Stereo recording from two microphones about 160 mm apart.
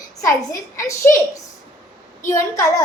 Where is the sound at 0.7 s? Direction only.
20° left (ahead or behind).